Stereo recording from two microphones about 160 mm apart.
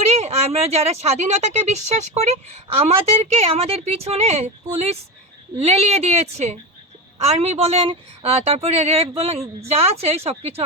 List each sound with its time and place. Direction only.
0.0 s speech: 40° right (ahead or behind)